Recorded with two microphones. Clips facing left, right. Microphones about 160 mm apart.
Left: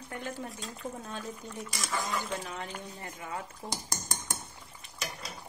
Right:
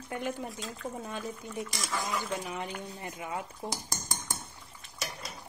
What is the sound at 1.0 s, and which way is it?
Speech, 15° right (ahead or behind).